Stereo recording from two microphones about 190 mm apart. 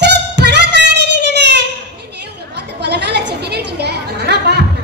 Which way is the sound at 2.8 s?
60° right (ahead or behind).